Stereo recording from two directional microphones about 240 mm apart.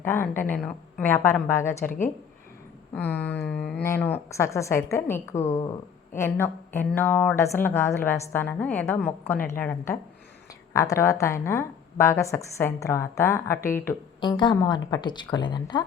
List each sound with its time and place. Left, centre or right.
0.0 s a woman's voice: centre
2.9 s a woman's voice: centre